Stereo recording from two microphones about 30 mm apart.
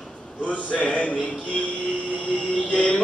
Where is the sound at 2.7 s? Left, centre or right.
Left.